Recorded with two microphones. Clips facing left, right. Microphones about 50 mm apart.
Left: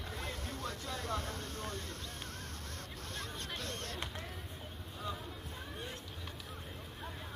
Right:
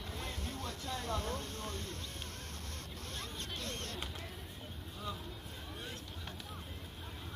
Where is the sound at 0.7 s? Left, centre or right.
Left.